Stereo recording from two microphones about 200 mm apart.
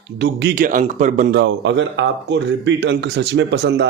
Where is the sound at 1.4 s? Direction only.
65° right (ahead or behind).